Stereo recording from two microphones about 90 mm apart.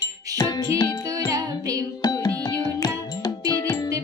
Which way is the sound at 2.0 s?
45° left (ahead or behind).